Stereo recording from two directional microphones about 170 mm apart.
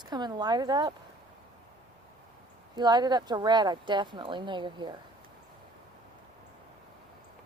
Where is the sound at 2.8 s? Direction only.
25° right (ahead or behind).